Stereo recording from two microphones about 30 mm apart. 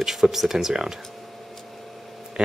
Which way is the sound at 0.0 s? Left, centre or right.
Centre.